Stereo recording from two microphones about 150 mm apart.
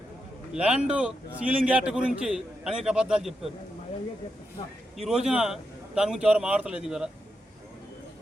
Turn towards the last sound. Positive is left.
turn(degrees=-5)  # may be behind; listen again after turning